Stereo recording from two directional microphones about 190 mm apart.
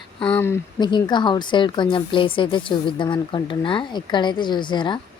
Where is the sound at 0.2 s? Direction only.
10° left (ahead or behind).